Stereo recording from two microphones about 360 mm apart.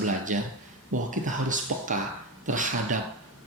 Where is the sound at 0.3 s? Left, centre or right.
Right.